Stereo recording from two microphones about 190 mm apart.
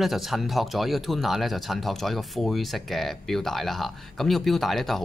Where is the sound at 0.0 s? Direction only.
Centre (ahead or behind).